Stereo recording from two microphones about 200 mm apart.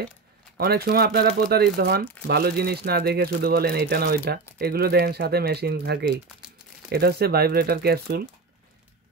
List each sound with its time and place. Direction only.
0.6 s speech: 50° right (ahead or behind)